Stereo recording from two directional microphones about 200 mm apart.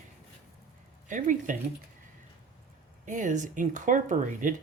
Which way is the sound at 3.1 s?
40° right (ahead or behind).